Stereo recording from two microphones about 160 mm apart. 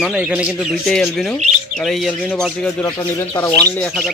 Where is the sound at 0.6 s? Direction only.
Centre (ahead or behind).